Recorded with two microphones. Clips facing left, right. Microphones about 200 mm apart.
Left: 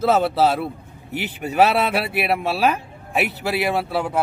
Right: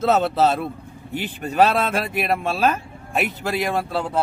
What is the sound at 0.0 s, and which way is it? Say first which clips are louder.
Speech: left 1 dB; 10° left (ahead or behind).